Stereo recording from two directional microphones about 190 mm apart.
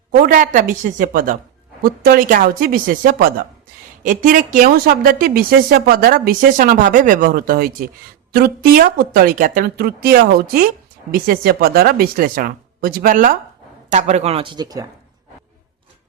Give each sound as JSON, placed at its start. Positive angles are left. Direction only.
{"t": 0.1, "sound": "speech", "side_deg": -50}